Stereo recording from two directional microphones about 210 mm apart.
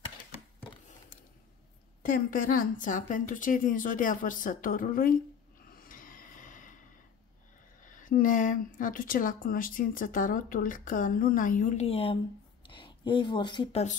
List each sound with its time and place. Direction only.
2.0 s a woman's voice: 40° left (ahead or behind)
5.7 s snort: 40° left (ahead or behind)
7.8 s a woman's voice: 40° left (ahead or behind)